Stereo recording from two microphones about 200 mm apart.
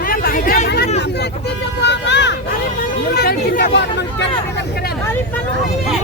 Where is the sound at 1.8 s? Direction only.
60° left (ahead or behind).